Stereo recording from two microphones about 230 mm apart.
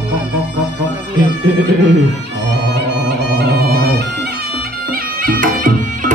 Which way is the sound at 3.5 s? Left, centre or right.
Right.